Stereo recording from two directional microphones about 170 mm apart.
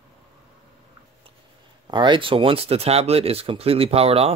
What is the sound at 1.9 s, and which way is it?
Speech, 25° right (ahead or behind).